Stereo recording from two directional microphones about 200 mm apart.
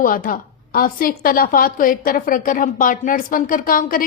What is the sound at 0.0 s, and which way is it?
A woman's voice, 45° left (ahead or behind).